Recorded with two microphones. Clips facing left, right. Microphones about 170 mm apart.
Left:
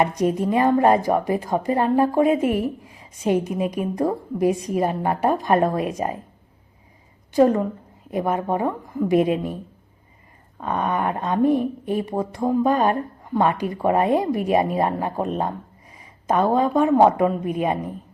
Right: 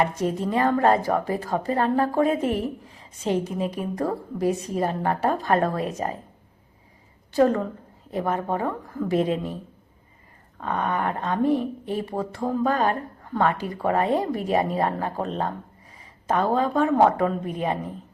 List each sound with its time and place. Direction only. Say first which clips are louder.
0.0 s a woman's voice: left 4 dB; 15° left (ahead or behind)
7.3 s a woman's voice: left 3 dB; 15° left (ahead or behind)
10.6 s a woman's voice: left 2 dB; 15° left (ahead or behind)